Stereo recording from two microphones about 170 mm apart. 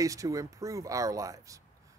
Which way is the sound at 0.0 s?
20° right (ahead or behind).